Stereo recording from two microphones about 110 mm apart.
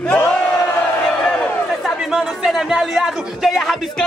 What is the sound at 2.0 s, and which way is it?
Speech, 5° right (ahead or behind).